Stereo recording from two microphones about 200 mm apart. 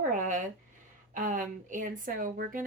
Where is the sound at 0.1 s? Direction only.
40° right (ahead or behind).